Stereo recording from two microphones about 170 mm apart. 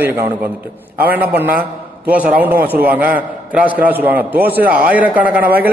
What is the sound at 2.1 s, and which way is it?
A man's voice, 10° right (ahead or behind).